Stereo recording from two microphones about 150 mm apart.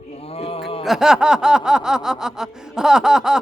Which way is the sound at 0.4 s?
40° left (ahead or behind).